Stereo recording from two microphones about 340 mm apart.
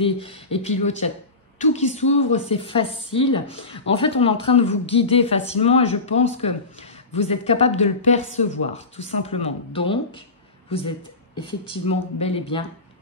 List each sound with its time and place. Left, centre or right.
0.0 s speech: centre